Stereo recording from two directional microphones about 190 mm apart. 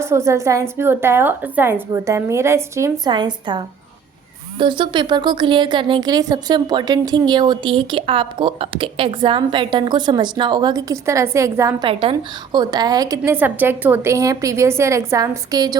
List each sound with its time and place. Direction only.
0.0 s a woman's voice: 15° right (ahead or behind)
11.9 s a woman's voice: 30° right (ahead or behind)